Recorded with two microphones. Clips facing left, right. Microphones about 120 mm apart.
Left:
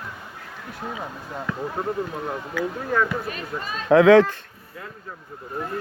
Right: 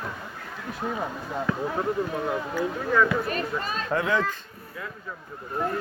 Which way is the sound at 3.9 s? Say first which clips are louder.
Left 13 dB; 90° left.